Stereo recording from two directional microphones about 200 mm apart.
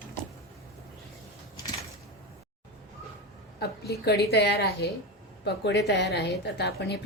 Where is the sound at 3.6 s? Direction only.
55° left (ahead or behind).